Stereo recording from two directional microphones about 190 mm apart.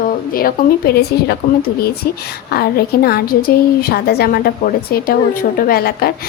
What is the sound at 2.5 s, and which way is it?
A woman's voice, 55° left (ahead or behind).